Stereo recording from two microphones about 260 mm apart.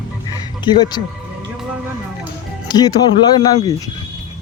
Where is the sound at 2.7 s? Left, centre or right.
Centre.